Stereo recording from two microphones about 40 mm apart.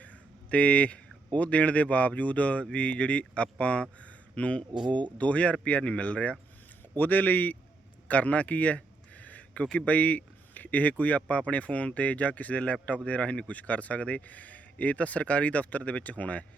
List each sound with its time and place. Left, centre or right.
0.0 s speech: left
6.9 s a man's voice: left
8.0 s a sound: left
9.7 s speech: left